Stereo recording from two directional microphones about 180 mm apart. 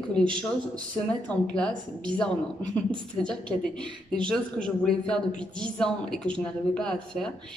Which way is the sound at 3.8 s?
25° right (ahead or behind).